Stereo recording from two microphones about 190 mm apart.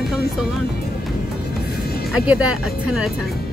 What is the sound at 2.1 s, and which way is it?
Speech, 5° right (ahead or behind).